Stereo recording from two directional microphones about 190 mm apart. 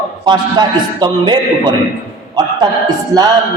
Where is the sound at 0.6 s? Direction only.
25° right (ahead or behind).